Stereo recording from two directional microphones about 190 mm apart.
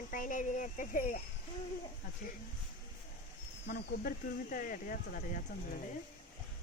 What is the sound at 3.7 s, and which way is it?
Speech, 55° left (ahead or behind).